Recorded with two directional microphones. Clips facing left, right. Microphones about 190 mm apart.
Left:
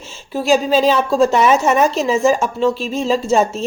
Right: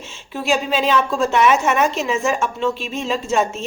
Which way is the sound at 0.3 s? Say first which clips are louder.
Left 6 dB; 40° left (ahead or behind).